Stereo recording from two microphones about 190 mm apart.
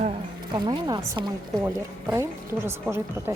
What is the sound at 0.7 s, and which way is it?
A woman's voice, 20° right (ahead or behind).